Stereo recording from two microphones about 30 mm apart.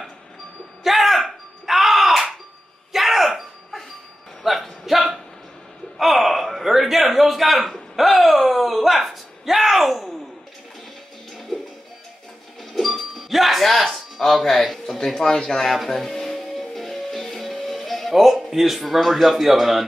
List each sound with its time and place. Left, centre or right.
0.8 s a sound: centre
11.3 s music: centre
12.7 s music: centre
14.5 s a man's voice: centre
16.3 s music: centre
18.1 s a man's voice: centre